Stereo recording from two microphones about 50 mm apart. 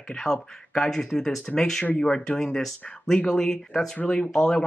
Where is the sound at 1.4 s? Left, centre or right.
Left.